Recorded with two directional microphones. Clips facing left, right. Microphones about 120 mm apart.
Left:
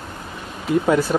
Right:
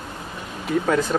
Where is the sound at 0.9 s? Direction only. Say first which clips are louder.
Left 3 dB; 10° left (ahead or behind).